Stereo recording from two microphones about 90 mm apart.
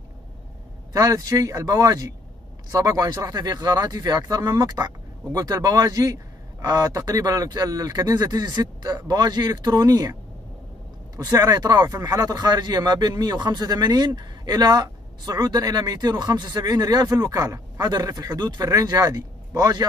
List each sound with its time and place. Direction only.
0.9 s speech: 45° right (ahead or behind)
11.1 s speech: 45° right (ahead or behind)